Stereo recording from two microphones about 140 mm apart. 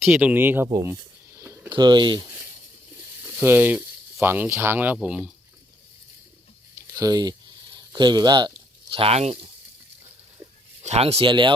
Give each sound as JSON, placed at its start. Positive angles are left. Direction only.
{"t": 0.1, "sound": "speech", "side_deg": -10}
{"t": 1.7, "sound": "speech", "side_deg": -35}
{"t": 3.2, "sound": "speech", "side_deg": -15}
{"t": 6.9, "sound": "a sound", "side_deg": -25}
{"t": 10.8, "sound": "speech", "side_deg": -50}